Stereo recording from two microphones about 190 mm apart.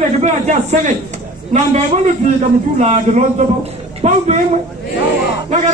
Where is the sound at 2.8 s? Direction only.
35° right (ahead or behind).